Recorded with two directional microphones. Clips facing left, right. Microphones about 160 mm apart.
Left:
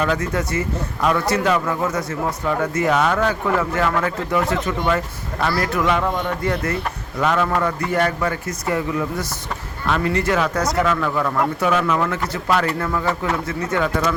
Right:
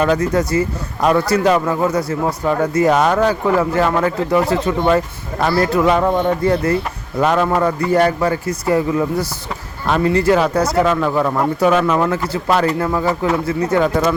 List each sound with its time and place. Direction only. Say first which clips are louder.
0.0 s speech: right 6 dB; 40° right (ahead or behind)